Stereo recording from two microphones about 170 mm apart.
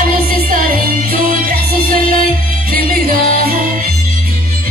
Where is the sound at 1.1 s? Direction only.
55° right (ahead or behind).